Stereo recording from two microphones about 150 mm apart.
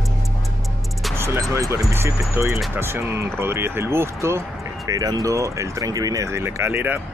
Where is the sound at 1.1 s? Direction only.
15° right (ahead or behind).